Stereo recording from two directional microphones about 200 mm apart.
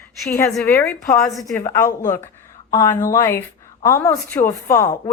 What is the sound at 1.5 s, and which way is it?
A woman's voice, 15° left (ahead or behind).